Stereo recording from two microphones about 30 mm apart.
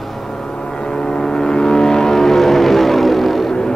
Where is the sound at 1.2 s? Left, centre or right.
Centre.